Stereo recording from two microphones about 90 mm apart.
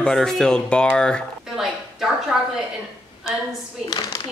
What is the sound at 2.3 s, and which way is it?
Speech, 10° right (ahead or behind).